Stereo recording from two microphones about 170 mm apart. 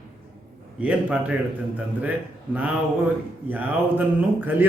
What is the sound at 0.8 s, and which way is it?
Speech, 10° right (ahead or behind).